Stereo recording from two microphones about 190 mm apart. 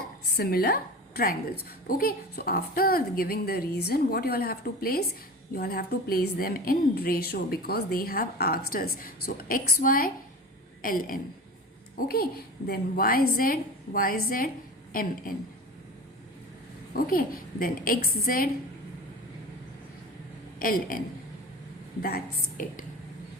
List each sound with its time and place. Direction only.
0.3 s a woman's voice: 55° left (ahead or behind)
16.9 s a woman's voice: 50° left (ahead or behind)
20.6 s a woman's voice: 50° left (ahead or behind)
22.0 s a woman's voice: 50° left (ahead or behind)